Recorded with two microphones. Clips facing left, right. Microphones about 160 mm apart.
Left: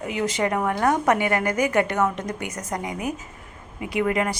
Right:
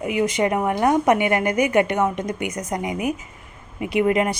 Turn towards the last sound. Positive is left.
turn(degrees=-20)  # may be behind; listen again after turning